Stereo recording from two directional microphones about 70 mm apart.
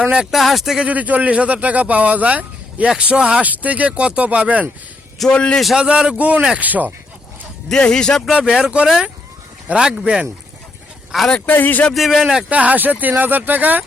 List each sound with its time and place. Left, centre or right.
0.3 s speech: centre
0.9 s speech: right
5.2 s speech: centre
5.7 s a man's voice: centre
7.7 s speech: centre
8.4 s a man's voice: centre
11.3 s speech: centre
11.9 s speech: centre
12.5 s speech: right